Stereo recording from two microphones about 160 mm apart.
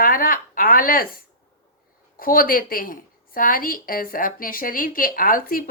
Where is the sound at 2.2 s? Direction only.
65° left (ahead or behind).